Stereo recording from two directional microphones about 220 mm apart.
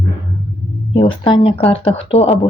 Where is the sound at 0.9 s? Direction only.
20° left (ahead or behind).